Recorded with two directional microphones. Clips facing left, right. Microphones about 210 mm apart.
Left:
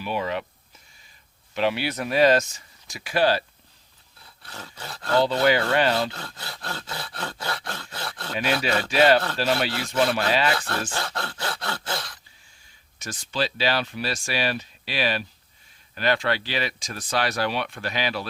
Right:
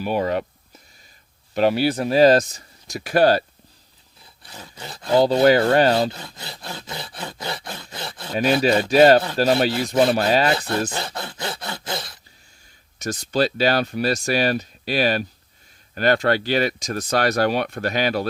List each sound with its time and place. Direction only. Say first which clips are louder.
0.0 s a sound: right 6 dB; 45° right (ahead or behind)
1.5 s speech: right 6 dB; 40° right (ahead or behind)
4.4 s a sound: right 1 dB; 15° right (ahead or behind)
5.2 s speech: right 7 dB; 40° right (ahead or behind)
6.1 s a sound: right 1 dB; 15° right (ahead or behind)
7.7 s groan: right 1 dB; 15° right (ahead or behind)
8.3 s speech: right 7 dB; 40° right (ahead or behind)
10.9 s groan: right 1 dB; 20° right (ahead or behind)
13.0 s speech: right 7 dB; 40° right (ahead or behind)